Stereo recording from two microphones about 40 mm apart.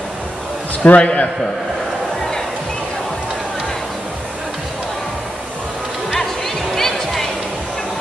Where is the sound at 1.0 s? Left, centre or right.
Left.